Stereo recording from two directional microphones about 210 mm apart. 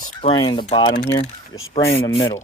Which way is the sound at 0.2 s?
25° left (ahead or behind).